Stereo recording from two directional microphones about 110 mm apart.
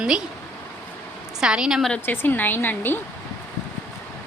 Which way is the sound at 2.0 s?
20° left (ahead or behind).